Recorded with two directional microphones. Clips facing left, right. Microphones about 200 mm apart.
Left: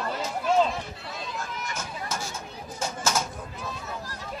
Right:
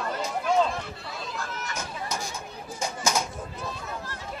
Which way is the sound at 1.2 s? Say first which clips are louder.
Even; 5° left (ahead or behind).